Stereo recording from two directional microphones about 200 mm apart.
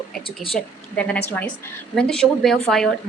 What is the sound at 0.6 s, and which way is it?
Speech, 5° left (ahead or behind).